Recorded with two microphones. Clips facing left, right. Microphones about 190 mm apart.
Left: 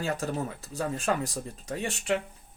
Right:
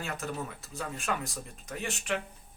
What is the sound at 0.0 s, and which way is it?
Speech, 35° left (ahead or behind).